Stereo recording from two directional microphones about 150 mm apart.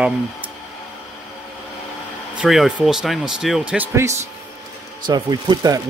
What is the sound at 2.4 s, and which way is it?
Speech, 5° right (ahead or behind).